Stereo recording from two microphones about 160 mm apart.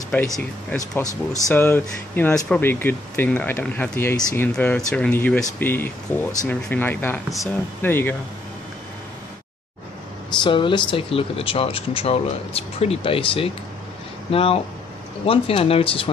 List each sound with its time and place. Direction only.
0.4 s speech: 10° left (ahead or behind)
10.4 s speech: 30° left (ahead or behind)